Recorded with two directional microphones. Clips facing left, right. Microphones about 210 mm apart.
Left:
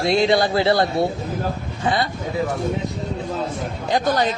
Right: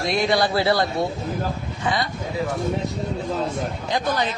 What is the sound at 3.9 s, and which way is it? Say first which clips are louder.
Speech: left 4 dB; 40° left (ahead or behind).